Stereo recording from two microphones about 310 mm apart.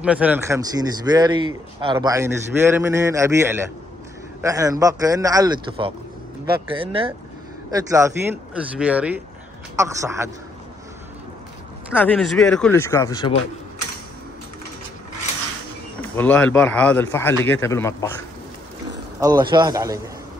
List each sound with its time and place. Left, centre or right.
0.0 s a man's voice: centre
11.9 s a man's voice: centre
16.0 s a man's voice: centre
19.1 s speech: centre